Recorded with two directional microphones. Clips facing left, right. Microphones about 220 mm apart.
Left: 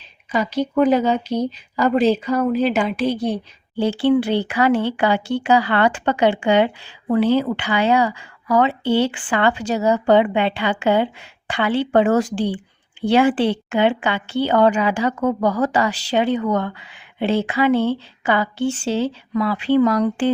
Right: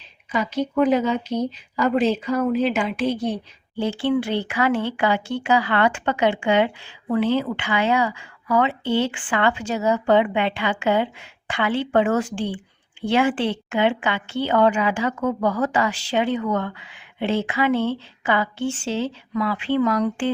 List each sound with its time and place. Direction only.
0.3 s a woman's voice: 40° left (ahead or behind)